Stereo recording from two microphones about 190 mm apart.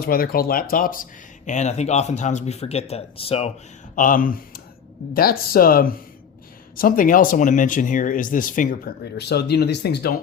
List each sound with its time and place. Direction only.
0.0 s speech: 50° left (ahead or behind); by 3.5 s 30° left (ahead or behind)
3.9 s speech: 45° left (ahead or behind)